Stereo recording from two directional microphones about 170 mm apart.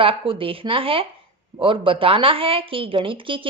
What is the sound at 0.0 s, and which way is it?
A woman's voice, 30° right (ahead or behind).